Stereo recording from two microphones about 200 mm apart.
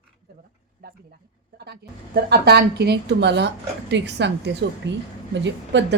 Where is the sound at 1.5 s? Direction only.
55° right (ahead or behind).